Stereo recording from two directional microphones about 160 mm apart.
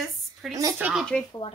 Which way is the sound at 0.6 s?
20° right (ahead or behind).